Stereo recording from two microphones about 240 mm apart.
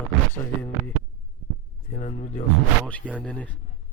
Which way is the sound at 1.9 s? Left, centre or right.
Left.